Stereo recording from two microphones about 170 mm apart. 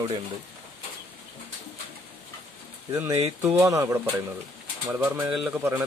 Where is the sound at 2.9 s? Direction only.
15° right (ahead or behind).